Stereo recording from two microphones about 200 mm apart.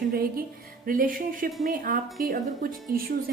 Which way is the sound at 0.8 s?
45° right (ahead or behind).